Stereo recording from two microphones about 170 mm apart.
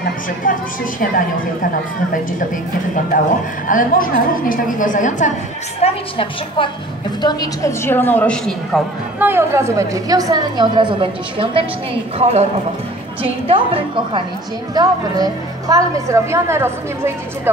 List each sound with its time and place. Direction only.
0.0 s a woman's voice: 55° left (ahead or behind)
3.6 s a woman's voice: 55° left (ahead or behind)
5.8 s a woman's voice: 35° left (ahead or behind)
7.2 s a woman's voice: 25° left (ahead or behind); by 8.8 s 5° left (ahead or behind)
9.2 s a woman's voice: 15° right (ahead or behind)